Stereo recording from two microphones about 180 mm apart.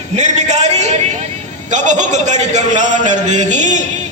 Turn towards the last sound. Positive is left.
turn(degrees=-40)  # may be behind; listen again after turning